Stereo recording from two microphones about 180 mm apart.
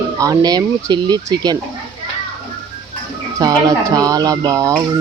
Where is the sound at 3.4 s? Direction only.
20° right (ahead or behind).